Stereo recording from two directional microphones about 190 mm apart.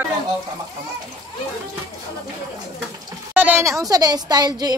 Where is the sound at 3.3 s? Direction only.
10° right (ahead or behind).